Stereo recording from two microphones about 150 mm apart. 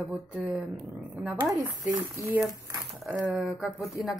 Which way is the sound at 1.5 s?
20° right (ahead or behind).